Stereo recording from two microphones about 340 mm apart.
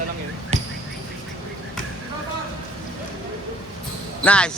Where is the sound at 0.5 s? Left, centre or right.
Centre.